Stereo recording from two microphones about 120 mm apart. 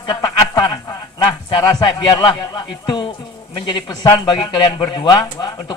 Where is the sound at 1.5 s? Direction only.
40° left (ahead or behind).